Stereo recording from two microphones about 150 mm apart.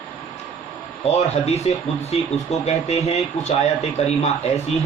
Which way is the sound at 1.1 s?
45° left (ahead or behind).